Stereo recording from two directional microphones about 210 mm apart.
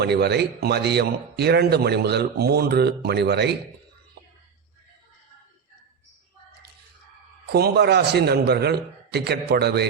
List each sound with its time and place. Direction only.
0.0 s a man's voice: 50° right (ahead or behind)
7.4 s a man's voice: 50° right (ahead or behind)